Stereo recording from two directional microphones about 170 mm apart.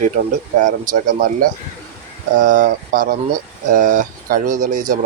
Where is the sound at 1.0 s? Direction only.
55° right (ahead or behind).